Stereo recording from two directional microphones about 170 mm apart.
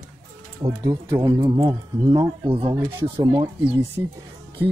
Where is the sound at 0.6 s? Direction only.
25° right (ahead or behind).